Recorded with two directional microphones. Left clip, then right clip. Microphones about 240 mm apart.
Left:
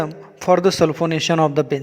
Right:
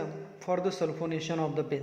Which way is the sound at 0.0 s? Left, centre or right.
Left.